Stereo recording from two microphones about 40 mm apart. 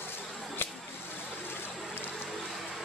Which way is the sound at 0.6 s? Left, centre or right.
Left.